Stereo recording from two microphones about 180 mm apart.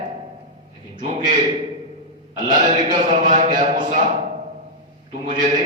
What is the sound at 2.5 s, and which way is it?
A man's voice, 45° right (ahead or behind).